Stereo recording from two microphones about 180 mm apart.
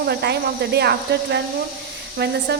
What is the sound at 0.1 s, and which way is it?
A woman's voice, 65° right (ahead or behind).